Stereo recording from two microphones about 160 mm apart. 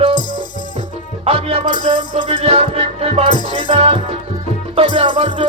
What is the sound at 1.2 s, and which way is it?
Music, 40° right (ahead or behind).